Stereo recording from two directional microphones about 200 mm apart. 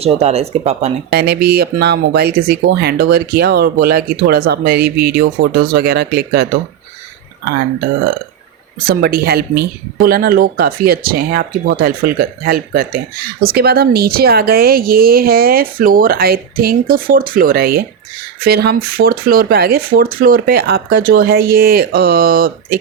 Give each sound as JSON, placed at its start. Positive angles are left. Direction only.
{"t": 0.0, "sound": "speech", "side_deg": -30}
{"t": 1.1, "sound": "speech", "side_deg": -50}
{"t": 8.8, "sound": "speech", "side_deg": -50}